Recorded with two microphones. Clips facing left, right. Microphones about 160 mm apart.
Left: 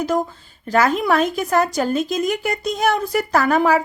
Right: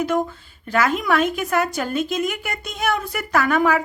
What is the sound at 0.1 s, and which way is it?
A woman's voice, 35° left (ahead or behind).